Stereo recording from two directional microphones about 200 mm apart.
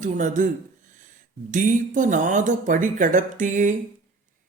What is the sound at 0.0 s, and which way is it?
Mantra, 40° right (ahead or behind).